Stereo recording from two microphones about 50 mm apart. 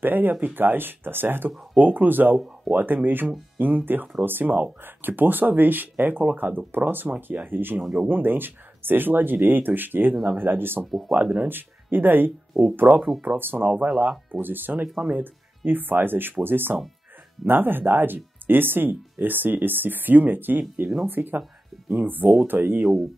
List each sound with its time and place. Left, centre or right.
0.0 s speech: right
1.5 s speech: centre
1.8 s speech: right
7.8 s speech: centre
8.1 s speech: right
10.9 s speech: centre
11.1 s speech: centre
11.4 s speech: right
13.7 s speech: right
14.3 s speech: right
21.4 s music: centre
22.0 s speech: right
22.8 s speech: centre